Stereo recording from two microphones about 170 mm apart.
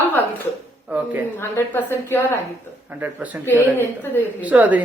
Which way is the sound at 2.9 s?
10° right (ahead or behind).